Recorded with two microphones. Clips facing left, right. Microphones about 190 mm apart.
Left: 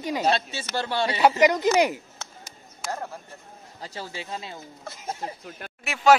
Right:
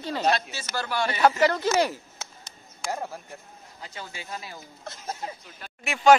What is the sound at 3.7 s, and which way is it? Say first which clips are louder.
Speech: left 4 dB; 35° left (ahead or behind).